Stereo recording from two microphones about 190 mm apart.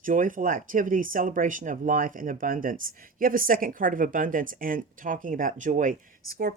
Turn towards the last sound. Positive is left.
turn(degrees=-50)  # may be behind; listen again after turning